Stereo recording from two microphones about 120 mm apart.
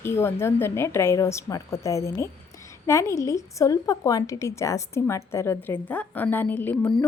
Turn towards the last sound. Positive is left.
turn(degrees=10)  # may be behind; listen again after turning